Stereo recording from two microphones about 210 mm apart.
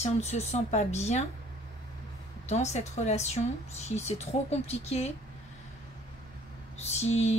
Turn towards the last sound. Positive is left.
turn(degrees=30)  # may be behind; listen again after turning